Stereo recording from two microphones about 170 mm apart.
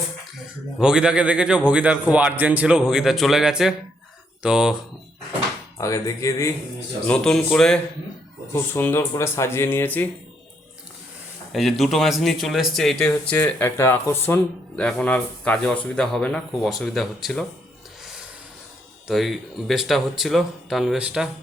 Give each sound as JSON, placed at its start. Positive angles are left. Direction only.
{"t": 0.8, "sound": "speech", "side_deg": -5}
{"t": 5.7, "sound": "speech", "side_deg": 20}
{"t": 7.1, "sound": "speech", "side_deg": 5}
{"t": 11.5, "sound": "speech", "side_deg": 0}
{"t": 19.0, "sound": "speech", "side_deg": 0}